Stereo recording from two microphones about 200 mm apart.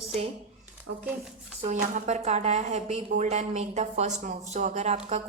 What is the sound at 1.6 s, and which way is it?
A woman's voice, 40° right (ahead or behind).